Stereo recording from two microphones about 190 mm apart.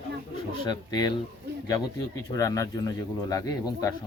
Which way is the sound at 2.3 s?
15° left (ahead or behind).